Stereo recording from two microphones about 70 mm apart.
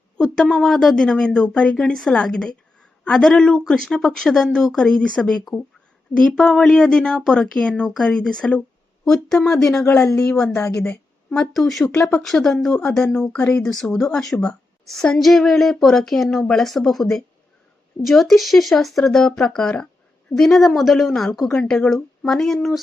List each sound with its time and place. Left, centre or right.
0.2 s speech: centre
11.9 s speech: left
12.2 s a woman's voice: centre